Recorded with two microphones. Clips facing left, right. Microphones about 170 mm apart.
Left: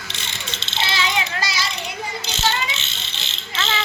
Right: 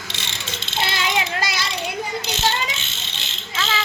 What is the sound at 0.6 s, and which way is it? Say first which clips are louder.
Mechanisms: even; 50° right (ahead or behind).